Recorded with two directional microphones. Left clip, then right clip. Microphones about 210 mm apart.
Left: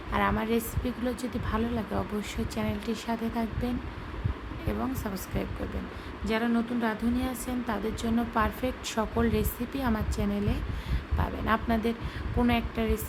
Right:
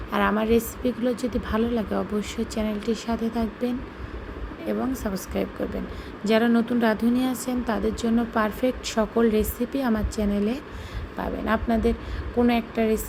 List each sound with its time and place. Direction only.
0.1 s a woman's voice: 10° right (ahead or behind)
4.7 s a woman's voice: 5° right (ahead or behind)